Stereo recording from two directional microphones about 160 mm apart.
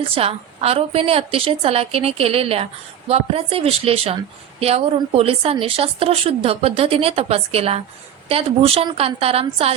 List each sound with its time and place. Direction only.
0.0 s speech: 35° right (ahead or behind)